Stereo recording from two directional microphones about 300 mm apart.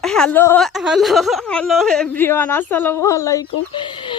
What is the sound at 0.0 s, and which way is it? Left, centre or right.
Speech, centre.